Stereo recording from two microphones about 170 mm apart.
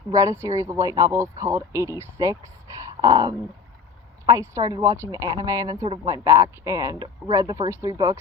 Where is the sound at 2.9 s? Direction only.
20° right (ahead or behind).